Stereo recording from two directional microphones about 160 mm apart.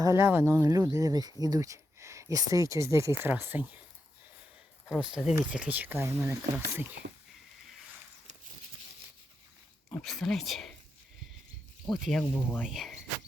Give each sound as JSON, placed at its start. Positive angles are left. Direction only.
{"t": 0.0, "sound": "speech", "side_deg": -15}
{"t": 4.9, "sound": "speech", "side_deg": -5}
{"t": 7.0, "sound": "speech", "side_deg": -70}
{"t": 9.9, "sound": "speech", "side_deg": 5}
{"t": 11.9, "sound": "speech", "side_deg": 0}